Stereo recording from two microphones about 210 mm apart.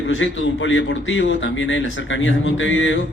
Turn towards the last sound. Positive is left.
turn(degrees=65)  # may be behind; listen again after turning